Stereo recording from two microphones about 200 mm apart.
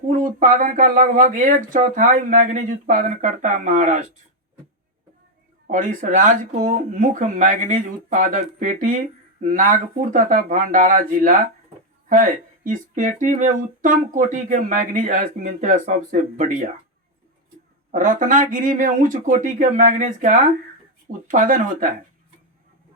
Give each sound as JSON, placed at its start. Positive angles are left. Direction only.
{"t": 0.1, "sound": "speech", "side_deg": -45}
{"t": 5.6, "sound": "speech", "side_deg": -40}
{"t": 17.9, "sound": "speech", "side_deg": -40}